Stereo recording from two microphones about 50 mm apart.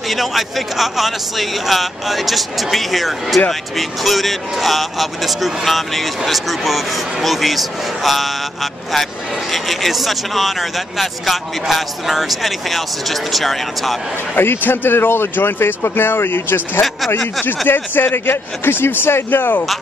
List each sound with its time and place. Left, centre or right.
0.1 s speech: centre
9.5 s speech: centre
14.3 s speech: left